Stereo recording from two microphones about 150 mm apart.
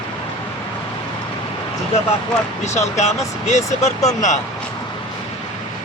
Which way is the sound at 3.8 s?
50° left (ahead or behind).